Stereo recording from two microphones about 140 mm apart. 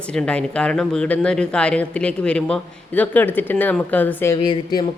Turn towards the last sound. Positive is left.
turn(degrees=30)  # may be behind; listen again after turning